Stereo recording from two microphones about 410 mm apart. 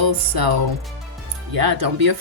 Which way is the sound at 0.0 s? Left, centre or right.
Right.